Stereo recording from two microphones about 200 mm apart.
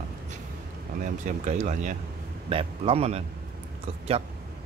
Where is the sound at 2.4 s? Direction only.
30° right (ahead or behind).